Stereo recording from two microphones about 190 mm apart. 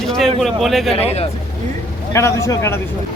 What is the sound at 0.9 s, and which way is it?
Speech, 30° left (ahead or behind).